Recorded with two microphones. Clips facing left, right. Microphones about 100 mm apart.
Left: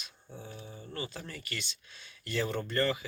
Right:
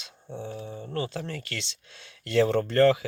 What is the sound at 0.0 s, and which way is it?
Speech, 75° right (ahead or behind).